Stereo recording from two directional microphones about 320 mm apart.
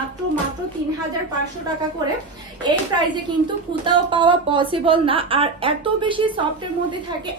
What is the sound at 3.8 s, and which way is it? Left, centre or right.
A woman's voice, centre.